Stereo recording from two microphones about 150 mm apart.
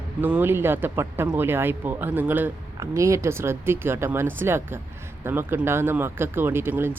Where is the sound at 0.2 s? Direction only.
10° right (ahead or behind).